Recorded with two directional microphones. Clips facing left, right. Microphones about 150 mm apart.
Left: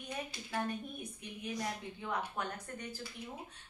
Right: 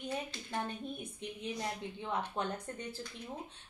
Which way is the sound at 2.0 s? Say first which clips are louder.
Right 3 dB; 25° right (ahead or behind).